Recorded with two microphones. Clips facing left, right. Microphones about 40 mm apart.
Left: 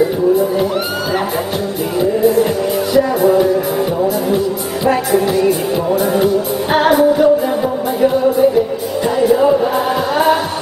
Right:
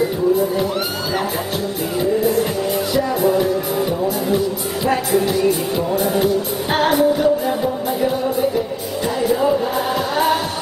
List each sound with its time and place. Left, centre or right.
2.0 s music: centre
5.1 s music: left
5.9 s music: centre